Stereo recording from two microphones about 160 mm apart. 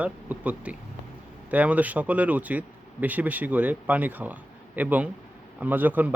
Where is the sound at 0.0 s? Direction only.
10° right (ahead or behind).